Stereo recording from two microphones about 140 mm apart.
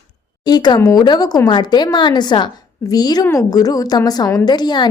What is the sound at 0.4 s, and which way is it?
A woman's voice, 30° left (ahead or behind).